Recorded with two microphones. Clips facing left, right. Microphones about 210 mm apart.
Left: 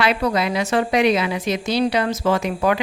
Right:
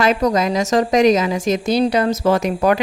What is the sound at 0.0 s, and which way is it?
A woman's voice, 45° right (ahead or behind).